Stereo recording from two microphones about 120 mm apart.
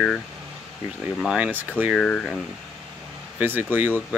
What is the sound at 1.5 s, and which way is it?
Speech, 15° right (ahead or behind).